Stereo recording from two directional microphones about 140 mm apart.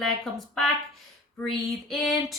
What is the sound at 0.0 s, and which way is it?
Speech, centre (ahead or behind).